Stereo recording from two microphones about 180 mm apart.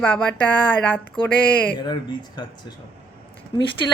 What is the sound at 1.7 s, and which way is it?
Speech, 25° left (ahead or behind).